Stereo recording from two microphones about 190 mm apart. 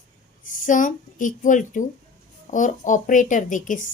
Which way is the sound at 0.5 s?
45° left (ahead or behind).